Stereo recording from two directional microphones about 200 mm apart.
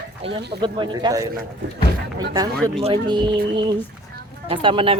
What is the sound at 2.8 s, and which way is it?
Speech, 25° right (ahead or behind).